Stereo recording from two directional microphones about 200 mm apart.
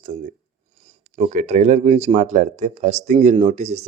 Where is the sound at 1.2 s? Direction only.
35° right (ahead or behind).